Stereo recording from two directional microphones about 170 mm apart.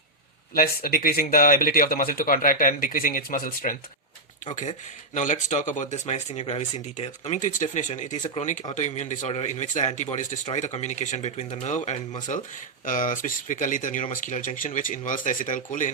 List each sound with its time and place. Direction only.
0.5 s speech: 60° left (ahead or behind)
5.1 s speech: 45° left (ahead or behind)